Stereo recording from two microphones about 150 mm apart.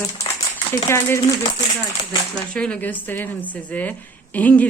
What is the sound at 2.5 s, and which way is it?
A woman's voice, 10° left (ahead or behind).